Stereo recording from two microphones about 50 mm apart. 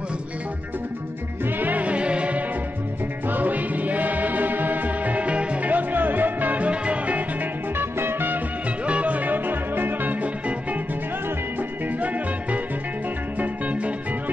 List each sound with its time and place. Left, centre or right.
1.6 s music: right
3.3 s music: right
7.7 s music: right
8.8 s music: right
12.0 s music: right